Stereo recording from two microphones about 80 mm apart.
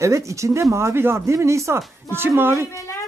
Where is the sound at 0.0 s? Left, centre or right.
Right.